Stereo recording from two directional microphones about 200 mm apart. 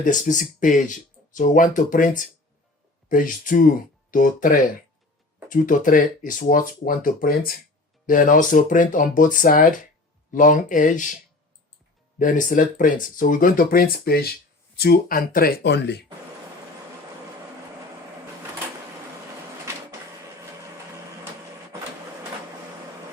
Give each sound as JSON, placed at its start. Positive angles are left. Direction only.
{"t": 0.0, "sound": "speech", "side_deg": 40}
{"t": 12.2, "sound": "speech", "side_deg": 40}